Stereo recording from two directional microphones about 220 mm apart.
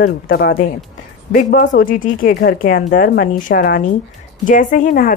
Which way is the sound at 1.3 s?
35° left (ahead or behind).